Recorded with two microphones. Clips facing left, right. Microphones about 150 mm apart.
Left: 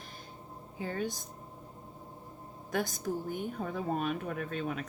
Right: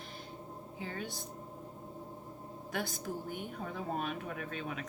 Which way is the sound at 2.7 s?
45° left (ahead or behind).